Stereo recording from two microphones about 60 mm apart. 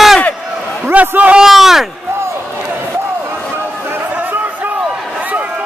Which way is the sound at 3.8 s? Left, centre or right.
Right.